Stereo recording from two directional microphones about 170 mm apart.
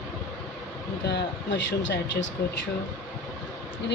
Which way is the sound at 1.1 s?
90° left.